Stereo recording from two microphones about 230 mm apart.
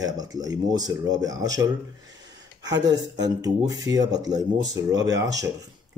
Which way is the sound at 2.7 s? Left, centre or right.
Centre.